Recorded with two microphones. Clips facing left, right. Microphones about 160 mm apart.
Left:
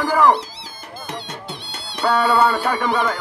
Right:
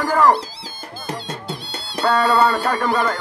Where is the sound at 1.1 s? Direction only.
35° right (ahead or behind).